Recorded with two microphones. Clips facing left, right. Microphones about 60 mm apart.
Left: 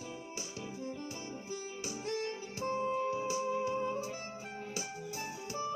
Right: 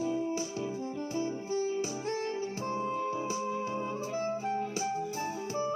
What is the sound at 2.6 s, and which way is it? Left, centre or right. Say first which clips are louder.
Music: left 2 dB; right.